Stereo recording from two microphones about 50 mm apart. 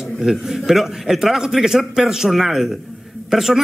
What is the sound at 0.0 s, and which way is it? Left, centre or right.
A man's voice, centre.